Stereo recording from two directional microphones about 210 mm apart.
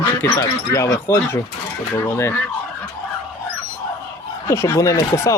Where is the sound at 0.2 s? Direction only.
10° left (ahead or behind).